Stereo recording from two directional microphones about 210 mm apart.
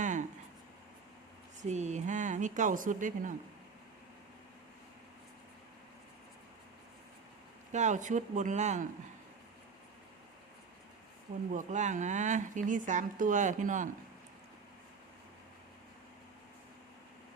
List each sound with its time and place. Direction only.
0.0 s a sound: 35° right (ahead or behind)
1.6 s speech: 35° right (ahead or behind)
7.7 s speech: 35° right (ahead or behind)
11.5 s speech: 35° right (ahead or behind)